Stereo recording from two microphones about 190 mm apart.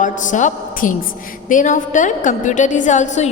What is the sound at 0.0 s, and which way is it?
A woman's voice, 40° left (ahead or behind).